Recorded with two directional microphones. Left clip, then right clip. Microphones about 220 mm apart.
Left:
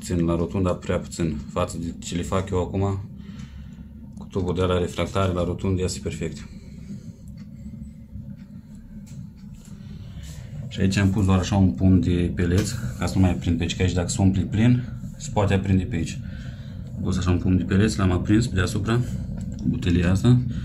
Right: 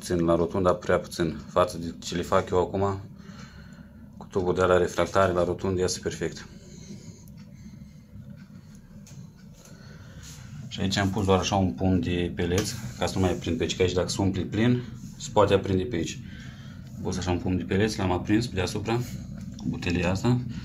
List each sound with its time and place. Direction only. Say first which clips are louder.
0.1 s speech: right 2 dB; 5° right (ahead or behind)
1.8 s speech: left 2 dB; 45° right (ahead or behind)
2.4 s speech: right 1 dB; 5° right (ahead or behind)
4.4 s speech: right 2 dB; 10° right (ahead or behind)
4.8 s speech: right 3 dB; centre (ahead or behind)
10.7 s speech: left 2 dB; centre (ahead or behind)